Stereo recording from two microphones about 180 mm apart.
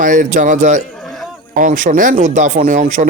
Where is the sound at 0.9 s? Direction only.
Centre (ahead or behind).